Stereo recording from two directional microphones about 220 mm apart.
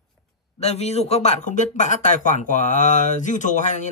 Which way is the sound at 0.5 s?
30° left (ahead or behind).